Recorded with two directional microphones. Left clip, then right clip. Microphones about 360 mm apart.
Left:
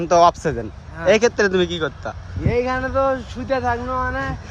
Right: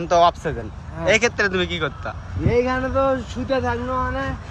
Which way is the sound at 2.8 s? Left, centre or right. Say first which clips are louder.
Left 1 dB; centre.